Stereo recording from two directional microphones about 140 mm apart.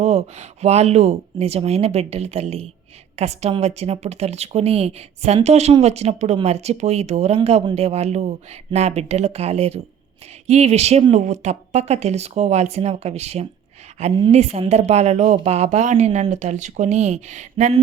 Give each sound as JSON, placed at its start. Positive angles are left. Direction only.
{"t": 0.0, "sound": "speech", "side_deg": -50}